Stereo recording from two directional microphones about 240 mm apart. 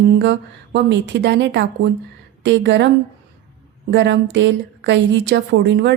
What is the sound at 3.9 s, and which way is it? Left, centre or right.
A woman's voice, right.